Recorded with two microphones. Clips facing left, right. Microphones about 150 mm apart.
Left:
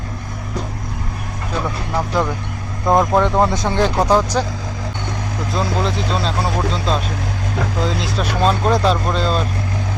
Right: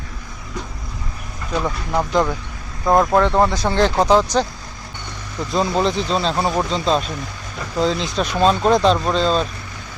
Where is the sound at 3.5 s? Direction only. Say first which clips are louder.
Even; 20° left (ahead or behind).